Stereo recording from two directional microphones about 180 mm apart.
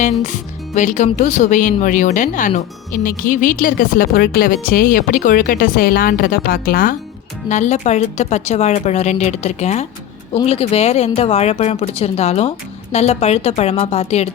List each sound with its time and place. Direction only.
0.0 s speech: 45° left (ahead or behind)
7.4 s speech: 40° left (ahead or behind)